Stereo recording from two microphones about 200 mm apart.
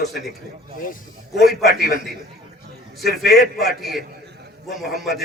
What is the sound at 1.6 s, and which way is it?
Speech, 50° left (ahead or behind).